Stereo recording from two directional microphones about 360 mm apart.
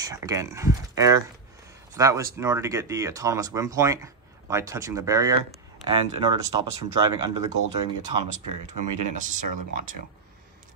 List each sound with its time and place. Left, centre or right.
0.0 s speech: centre
8.6 s speech: right